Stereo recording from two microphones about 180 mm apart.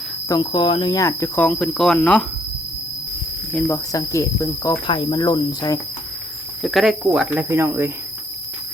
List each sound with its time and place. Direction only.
0.3 s speech: 25° left (ahead or behind); by 2.2 s 5° left (ahead or behind)
3.5 s speech: 10° left (ahead or behind)
6.6 s speech: centre (ahead or behind)